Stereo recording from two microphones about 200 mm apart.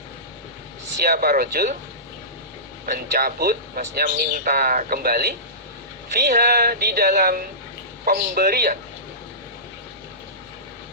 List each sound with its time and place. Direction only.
1.0 s speech: 50° right (ahead or behind)
2.8 s speech: 45° right (ahead or behind)